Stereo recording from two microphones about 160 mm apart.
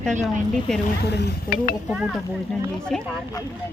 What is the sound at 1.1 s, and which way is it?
Speech, 90° left.